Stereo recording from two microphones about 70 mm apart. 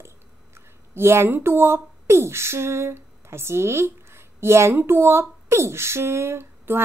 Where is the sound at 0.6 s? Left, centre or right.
Right.